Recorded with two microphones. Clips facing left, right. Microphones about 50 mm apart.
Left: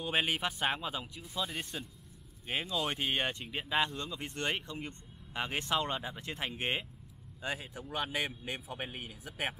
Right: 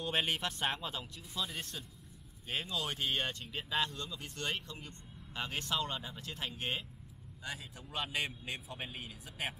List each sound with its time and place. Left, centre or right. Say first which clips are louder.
0.0 s speech: left 2 dB; centre; by 9.6 s left